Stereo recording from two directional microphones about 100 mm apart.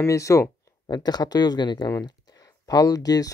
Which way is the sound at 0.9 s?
40° left (ahead or behind).